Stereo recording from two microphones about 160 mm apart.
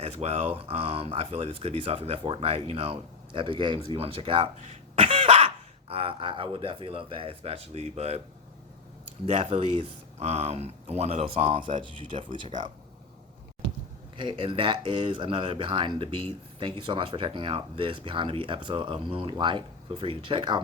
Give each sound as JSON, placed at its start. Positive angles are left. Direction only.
{"t": 0.0, "sound": "speech", "side_deg": -40}
{"t": 9.2, "sound": "speech", "side_deg": -35}
{"t": 12.3, "sound": "speech", "side_deg": -50}
{"t": 14.2, "sound": "speech", "side_deg": -30}